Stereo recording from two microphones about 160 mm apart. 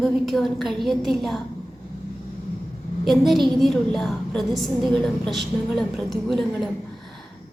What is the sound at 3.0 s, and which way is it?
A woman's voice, centre (ahead or behind).